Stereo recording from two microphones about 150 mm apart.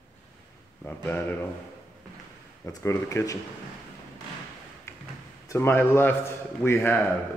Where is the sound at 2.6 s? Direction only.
20° left (ahead or behind).